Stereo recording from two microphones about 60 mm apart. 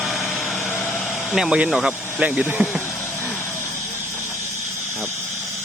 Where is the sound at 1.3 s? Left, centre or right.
Centre.